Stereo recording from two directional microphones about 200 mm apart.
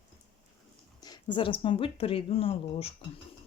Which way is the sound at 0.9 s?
20° left (ahead or behind).